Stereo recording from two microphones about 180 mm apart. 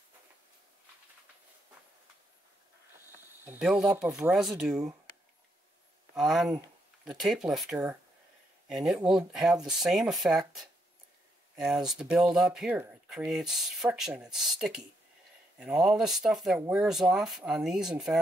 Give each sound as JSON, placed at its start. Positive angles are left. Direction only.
{"t": 3.4, "sound": "speech", "side_deg": -5}
{"t": 6.1, "sound": "speech", "side_deg": 0}
{"t": 11.5, "sound": "speech", "side_deg": 0}